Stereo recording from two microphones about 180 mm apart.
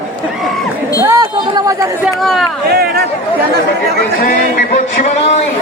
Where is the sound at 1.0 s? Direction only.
20° right (ahead or behind).